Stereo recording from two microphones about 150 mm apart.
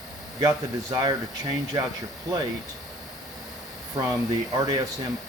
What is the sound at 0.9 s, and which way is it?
Speech, 30° right (ahead or behind).